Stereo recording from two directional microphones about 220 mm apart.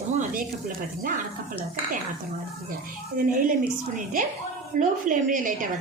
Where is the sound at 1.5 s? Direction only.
30° right (ahead or behind).